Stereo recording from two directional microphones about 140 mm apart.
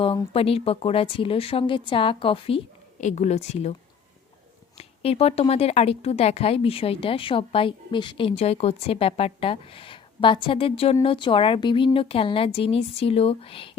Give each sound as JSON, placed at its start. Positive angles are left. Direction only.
{"t": 0.0, "sound": "speech", "side_deg": 40}
{"t": 3.0, "sound": "speech", "side_deg": 60}
{"t": 4.8, "sound": "speech", "side_deg": 45}